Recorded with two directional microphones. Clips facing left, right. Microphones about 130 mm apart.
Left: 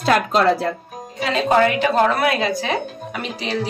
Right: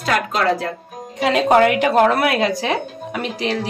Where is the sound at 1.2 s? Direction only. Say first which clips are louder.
Right 3 dB; 80° right.